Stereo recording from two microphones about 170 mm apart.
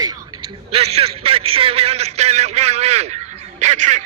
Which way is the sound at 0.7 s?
35° right (ahead or behind).